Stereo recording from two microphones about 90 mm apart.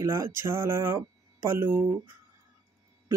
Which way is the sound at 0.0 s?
30° right (ahead or behind).